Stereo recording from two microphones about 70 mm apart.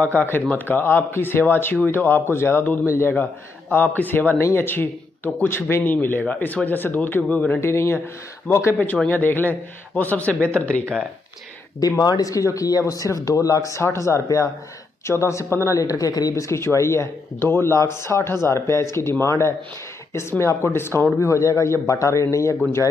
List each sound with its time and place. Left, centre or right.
0.5 s speech: left
7.6 s speech: left
8.7 s speech: centre
12.0 s speech: left
21.2 s speech: left